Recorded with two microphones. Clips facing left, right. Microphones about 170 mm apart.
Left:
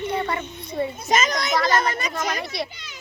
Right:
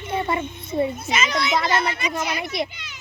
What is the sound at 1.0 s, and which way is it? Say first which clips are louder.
A child's voice: left 1 dB; 45° left (ahead or behind).